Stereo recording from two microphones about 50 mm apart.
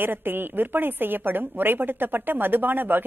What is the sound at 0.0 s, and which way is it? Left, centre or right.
A woman's voice, right.